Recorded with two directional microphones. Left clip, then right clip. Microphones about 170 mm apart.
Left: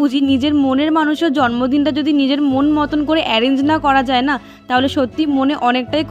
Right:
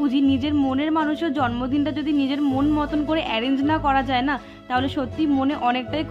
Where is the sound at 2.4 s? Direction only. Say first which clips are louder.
Left 6 dB; 25° left (ahead or behind).